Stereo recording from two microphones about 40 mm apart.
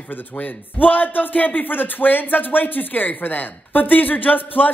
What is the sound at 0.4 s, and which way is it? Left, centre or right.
Speech, left.